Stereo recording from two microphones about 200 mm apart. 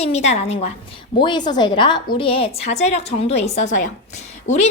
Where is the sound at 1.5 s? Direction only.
20° left (ahead or behind).